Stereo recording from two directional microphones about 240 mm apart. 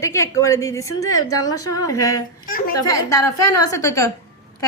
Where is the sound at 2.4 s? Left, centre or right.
Left.